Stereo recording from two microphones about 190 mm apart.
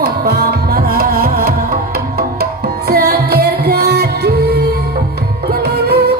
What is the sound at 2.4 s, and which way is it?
Tabla, 55° right (ahead or behind).